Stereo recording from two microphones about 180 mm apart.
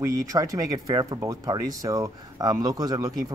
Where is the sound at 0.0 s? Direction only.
20° right (ahead or behind).